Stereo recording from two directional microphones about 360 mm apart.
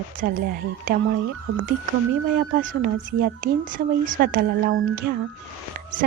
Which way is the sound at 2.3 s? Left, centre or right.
Right.